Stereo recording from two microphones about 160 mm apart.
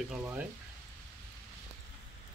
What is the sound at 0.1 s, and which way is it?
Speech, 10° right (ahead or behind).